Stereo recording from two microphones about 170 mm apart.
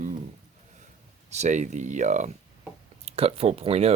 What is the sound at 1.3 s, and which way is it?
Speech, 45° right (ahead or behind).